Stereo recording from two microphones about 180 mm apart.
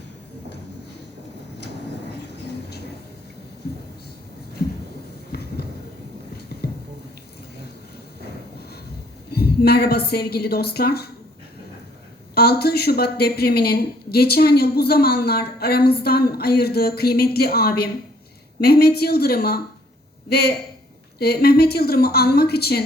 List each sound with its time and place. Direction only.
5.3 s a sound: 60° left (ahead or behind)
6.3 s music: 60° left (ahead or behind)
9.3 s speech: 60° left (ahead or behind)
12.3 s speech: 60° left (ahead or behind)